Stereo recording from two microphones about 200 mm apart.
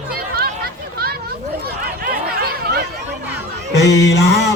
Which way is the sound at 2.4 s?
55° right (ahead or behind).